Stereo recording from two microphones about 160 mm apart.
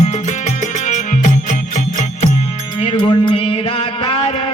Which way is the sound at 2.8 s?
35° left (ahead or behind).